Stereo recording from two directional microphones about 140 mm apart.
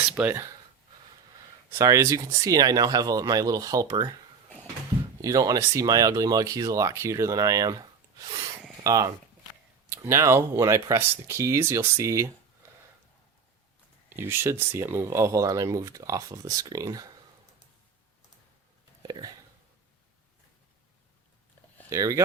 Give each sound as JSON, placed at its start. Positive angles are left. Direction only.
{"t": 0.1, "sound": "speech", "side_deg": -10}
{"t": 1.7, "sound": "speech", "side_deg": -20}
{"t": 5.2, "sound": "speech", "side_deg": -25}
{"t": 14.1, "sound": "speech", "side_deg": -15}
{"t": 19.0, "sound": "speech", "side_deg": -30}
{"t": 21.8, "sound": "speech", "side_deg": -25}